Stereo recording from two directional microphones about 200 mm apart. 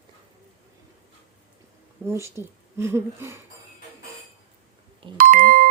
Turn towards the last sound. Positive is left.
turn(degrees=-45)  # may be behind; listen again after turning